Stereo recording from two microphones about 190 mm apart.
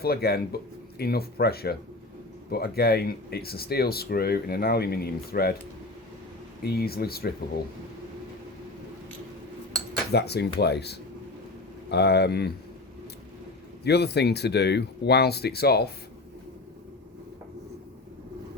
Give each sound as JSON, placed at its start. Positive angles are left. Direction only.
{"t": 0.0, "sound": "speech", "side_deg": 55}
{"t": 6.6, "sound": "speech", "side_deg": 55}
{"t": 10.1, "sound": "speech", "side_deg": 60}
{"t": 13.8, "sound": "speech", "side_deg": 60}